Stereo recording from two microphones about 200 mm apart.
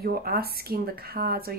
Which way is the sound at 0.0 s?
50° right (ahead or behind).